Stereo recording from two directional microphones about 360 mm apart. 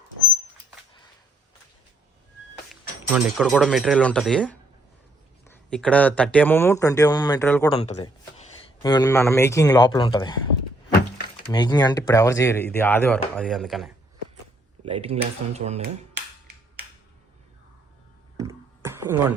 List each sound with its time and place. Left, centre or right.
3.1 s speech: centre
11.5 s speech: centre
14.8 s speech: centre
18.3 s a sound: centre